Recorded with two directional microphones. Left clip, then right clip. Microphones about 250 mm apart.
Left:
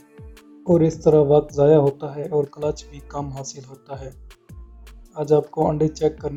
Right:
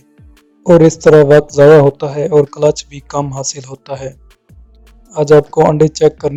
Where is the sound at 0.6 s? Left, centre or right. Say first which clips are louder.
Right 11 dB; right.